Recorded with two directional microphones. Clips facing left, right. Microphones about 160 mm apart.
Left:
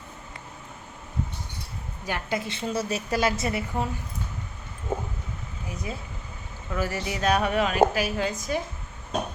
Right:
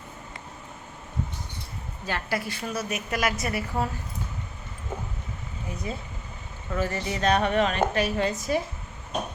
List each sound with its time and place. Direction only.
2.0 s a woman's voice: 15° left (ahead or behind)
5.6 s a woman's voice: centre (ahead or behind)